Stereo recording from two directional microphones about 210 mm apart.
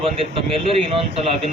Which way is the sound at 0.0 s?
25° right (ahead or behind).